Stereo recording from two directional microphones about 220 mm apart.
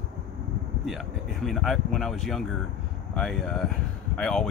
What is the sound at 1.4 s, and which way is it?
Speech, centre (ahead or behind).